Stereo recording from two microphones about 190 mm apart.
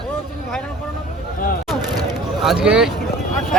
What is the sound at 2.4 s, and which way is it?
Speech, centre (ahead or behind).